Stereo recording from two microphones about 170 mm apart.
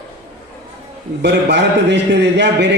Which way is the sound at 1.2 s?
90° right.